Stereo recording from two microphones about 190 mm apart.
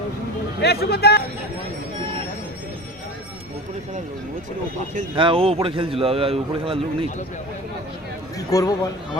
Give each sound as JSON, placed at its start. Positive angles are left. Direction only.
{"t": 0.6, "sound": "speech", "side_deg": 55}
{"t": 5.1, "sound": "a man's voice", "side_deg": -25}
{"t": 8.4, "sound": "speech", "side_deg": 20}